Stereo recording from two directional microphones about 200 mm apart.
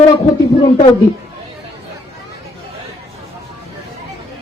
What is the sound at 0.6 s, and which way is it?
Speech, 25° left (ahead or behind).